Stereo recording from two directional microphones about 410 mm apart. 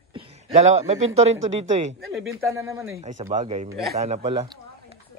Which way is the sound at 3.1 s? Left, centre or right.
Centre.